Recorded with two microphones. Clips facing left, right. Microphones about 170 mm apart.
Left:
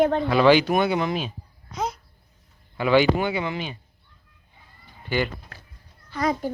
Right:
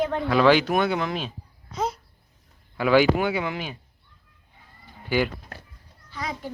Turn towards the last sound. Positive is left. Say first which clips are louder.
# left 9 dB
turn(degrees=45)  # may be behind; listen again after turning